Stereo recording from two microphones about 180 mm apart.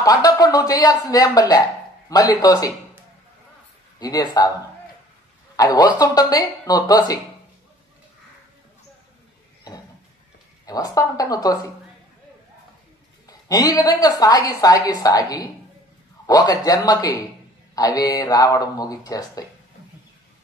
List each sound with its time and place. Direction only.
0.0 s a woman's voice: 20° left (ahead or behind)
4.0 s a woman's voice: 20° left (ahead or behind)
5.6 s a woman's voice: 20° left (ahead or behind)
10.6 s a woman's voice: 20° left (ahead or behind)
13.3 s a woman's voice: 20° left (ahead or behind)